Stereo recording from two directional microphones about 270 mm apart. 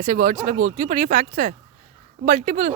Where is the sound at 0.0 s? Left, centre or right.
Right.